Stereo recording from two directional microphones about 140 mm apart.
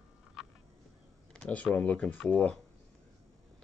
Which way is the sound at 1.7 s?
10° left (ahead or behind).